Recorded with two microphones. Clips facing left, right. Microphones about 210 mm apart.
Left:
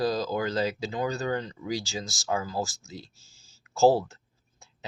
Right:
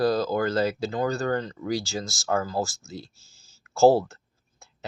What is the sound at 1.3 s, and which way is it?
Speech, 45° right (ahead or behind).